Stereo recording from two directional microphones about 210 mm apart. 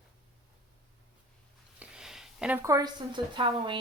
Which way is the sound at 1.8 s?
5° right (ahead or behind).